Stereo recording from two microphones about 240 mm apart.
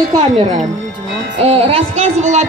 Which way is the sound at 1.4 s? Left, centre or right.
Right.